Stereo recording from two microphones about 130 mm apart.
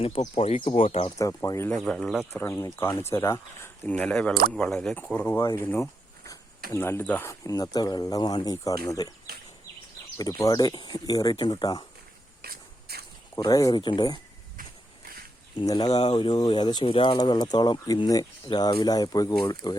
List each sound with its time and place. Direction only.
0.2 s speech: 50° left (ahead or behind)
1.2 s speech: 25° left (ahead or behind)
1.7 s speech: 5° left (ahead or behind)
2.4 s speech: 20° left (ahead or behind)
7.3 s speech: 25° left (ahead or behind)
10.2 s speech: 25° left (ahead or behind)
13.3 s speech: 25° left (ahead or behind)
15.5 s speech: 30° left (ahead or behind)